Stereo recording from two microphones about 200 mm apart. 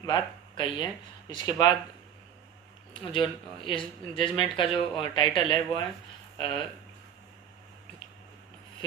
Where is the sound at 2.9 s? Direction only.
25° left (ahead or behind).